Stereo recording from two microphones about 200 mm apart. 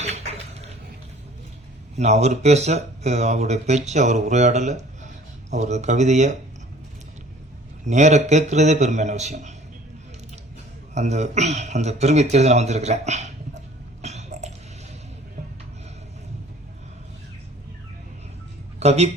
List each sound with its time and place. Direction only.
2.0 s speech: 35° right (ahead or behind)
7.9 s speech: 35° right (ahead or behind)
10.9 s speech: 35° right (ahead or behind)
14.0 s cough: 35° right (ahead or behind)
18.8 s a woman's voice: 35° right (ahead or behind)